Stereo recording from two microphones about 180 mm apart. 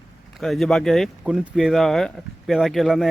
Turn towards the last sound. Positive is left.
turn(degrees=0)  # may be behind; listen again after turning